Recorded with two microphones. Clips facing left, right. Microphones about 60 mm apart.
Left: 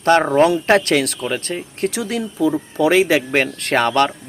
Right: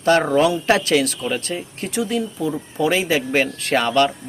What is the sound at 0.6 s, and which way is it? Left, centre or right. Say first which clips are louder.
Speech: left 2 dB; left.